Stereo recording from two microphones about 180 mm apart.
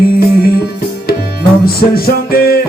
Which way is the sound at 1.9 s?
55° left (ahead or behind).